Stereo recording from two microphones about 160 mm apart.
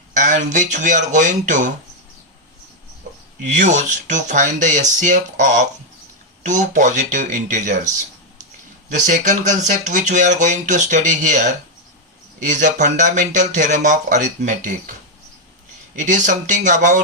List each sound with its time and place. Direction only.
0.2 s speech: 50° right (ahead or behind)
3.4 s speech: 50° right (ahead or behind)
16.0 s speech: 50° right (ahead or behind)